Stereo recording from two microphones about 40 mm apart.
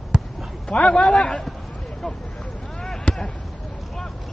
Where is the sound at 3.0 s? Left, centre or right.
Left.